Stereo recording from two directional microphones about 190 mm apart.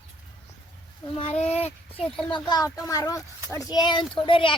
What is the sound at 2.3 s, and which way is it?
Speech, 20° left (ahead or behind).